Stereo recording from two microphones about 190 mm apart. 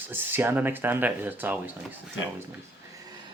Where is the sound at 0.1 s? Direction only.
10° right (ahead or behind).